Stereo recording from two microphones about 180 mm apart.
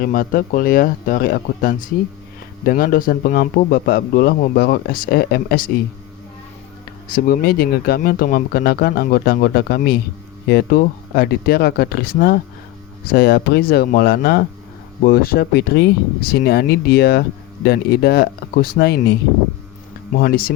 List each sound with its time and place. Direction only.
0.0 s a man's voice: 50° left (ahead or behind)
7.3 s a man's voice: 60° left (ahead or behind)
20.1 s a man's voice: 55° left (ahead or behind)